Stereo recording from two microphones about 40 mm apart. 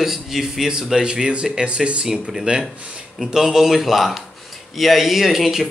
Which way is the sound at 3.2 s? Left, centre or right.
Centre.